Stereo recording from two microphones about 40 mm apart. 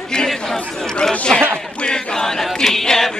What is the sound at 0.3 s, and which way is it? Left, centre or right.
Chatter, centre.